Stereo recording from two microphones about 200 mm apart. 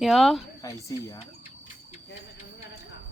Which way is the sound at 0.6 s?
15° left (ahead or behind).